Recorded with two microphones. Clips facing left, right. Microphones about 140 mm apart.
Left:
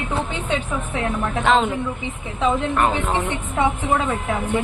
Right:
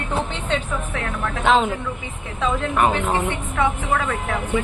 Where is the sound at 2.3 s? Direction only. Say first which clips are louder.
Left 1 dB; 20° left (ahead or behind).